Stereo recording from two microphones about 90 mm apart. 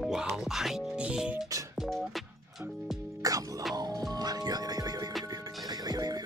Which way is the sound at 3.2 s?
40° right (ahead or behind).